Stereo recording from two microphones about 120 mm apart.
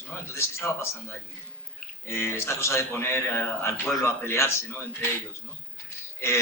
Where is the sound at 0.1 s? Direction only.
20° left (ahead or behind).